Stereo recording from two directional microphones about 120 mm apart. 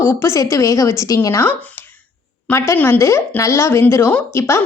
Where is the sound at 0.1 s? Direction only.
20° left (ahead or behind).